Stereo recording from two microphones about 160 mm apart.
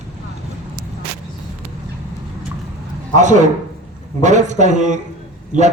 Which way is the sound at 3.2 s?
50° right (ahead or behind).